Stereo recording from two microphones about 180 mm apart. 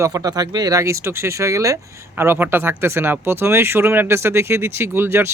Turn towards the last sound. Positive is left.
turn(degrees=-15)  # may be behind; listen again after turning